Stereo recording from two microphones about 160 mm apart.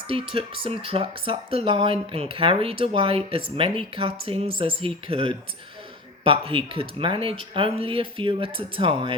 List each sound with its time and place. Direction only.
0.1 s speech: 35° right (ahead or behind)